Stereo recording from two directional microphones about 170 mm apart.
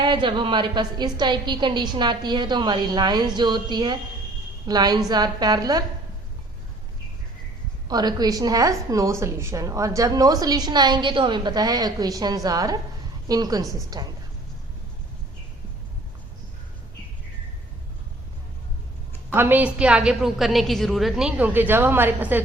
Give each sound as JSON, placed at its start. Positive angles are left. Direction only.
{"t": 0.0, "sound": "a woman's voice", "side_deg": -25}
{"t": 7.9, "sound": "a woman's voice", "side_deg": -25}
{"t": 19.3, "sound": "a woman's voice", "side_deg": -10}